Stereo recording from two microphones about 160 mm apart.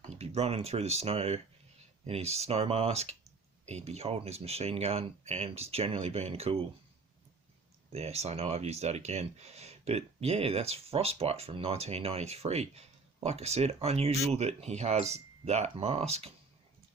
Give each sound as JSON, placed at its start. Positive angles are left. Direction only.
{"t": 0.2, "sound": "speech", "side_deg": -40}
{"t": 7.9, "sound": "speech", "side_deg": -40}